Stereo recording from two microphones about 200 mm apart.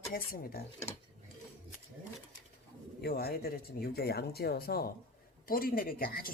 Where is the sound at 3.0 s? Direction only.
50° left (ahead or behind).